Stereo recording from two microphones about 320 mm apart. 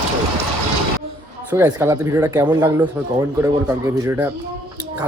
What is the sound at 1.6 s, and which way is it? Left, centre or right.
Speech, centre.